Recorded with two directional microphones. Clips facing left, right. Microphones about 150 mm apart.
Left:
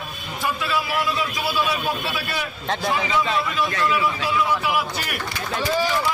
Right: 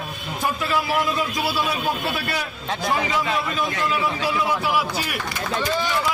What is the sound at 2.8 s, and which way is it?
Speech, 45° right (ahead or behind).